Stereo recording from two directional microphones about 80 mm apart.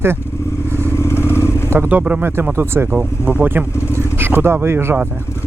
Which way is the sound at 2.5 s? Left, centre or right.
Right.